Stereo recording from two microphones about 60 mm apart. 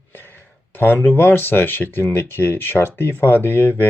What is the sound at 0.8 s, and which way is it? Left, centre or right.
Speech, left.